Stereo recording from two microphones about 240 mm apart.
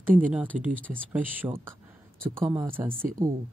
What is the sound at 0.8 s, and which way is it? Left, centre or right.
Speech, centre.